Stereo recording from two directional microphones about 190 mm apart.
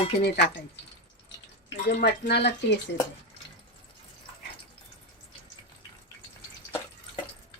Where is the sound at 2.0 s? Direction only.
60° left (ahead or behind).